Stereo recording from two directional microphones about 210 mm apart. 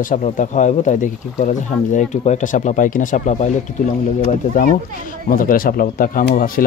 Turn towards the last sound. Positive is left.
turn(degrees=40)  # may be behind; listen again after turning